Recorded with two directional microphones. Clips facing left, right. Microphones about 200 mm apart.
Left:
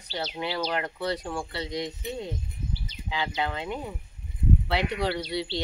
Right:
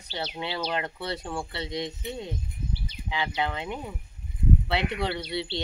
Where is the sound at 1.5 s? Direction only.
25° right (ahead or behind).